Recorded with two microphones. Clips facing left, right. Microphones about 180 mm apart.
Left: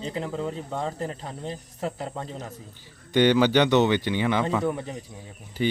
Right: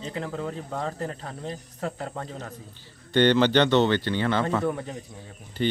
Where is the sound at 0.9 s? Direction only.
15° left (ahead or behind).